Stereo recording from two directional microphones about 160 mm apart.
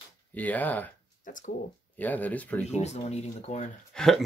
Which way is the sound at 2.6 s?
45° left (ahead or behind).